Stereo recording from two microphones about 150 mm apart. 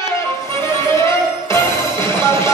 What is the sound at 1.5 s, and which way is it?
Music, 20° left (ahead or behind).